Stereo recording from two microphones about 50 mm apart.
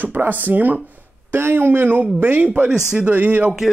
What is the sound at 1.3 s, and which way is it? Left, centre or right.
A man's voice, right.